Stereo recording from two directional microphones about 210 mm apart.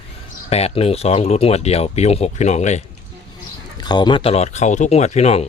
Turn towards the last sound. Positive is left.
turn(degrees=30)  # may be behind; listen again after turning